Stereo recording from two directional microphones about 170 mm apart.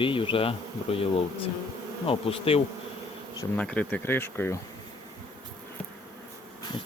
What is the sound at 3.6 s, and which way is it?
Speech, 5° left (ahead or behind).